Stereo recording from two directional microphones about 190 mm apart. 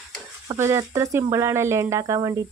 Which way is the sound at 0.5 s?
15° right (ahead or behind).